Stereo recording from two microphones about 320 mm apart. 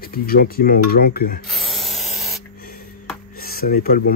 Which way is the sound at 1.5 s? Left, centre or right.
Centre.